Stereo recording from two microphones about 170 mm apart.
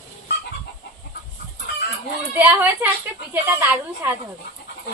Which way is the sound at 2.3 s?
10° right (ahead or behind).